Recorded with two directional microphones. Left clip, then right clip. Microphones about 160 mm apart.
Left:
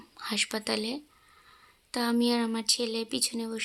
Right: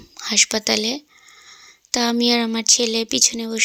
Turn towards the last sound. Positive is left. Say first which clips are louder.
# right 12 dB
turn(degrees=-35)  # may be behind; listen again after turning